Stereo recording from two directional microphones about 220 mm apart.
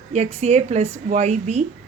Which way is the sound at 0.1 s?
30° right (ahead or behind).